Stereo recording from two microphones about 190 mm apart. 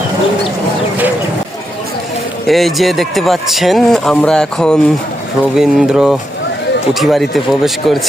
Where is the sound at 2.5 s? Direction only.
Centre (ahead or behind).